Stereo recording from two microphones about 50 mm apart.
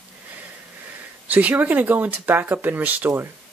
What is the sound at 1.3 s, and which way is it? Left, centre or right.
Speech, right.